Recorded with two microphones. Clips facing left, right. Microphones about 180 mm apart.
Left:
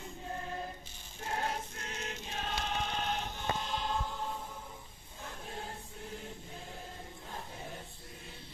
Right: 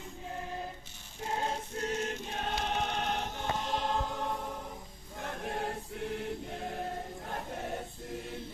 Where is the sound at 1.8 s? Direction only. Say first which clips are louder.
Right 8 dB; 45° right (ahead or behind).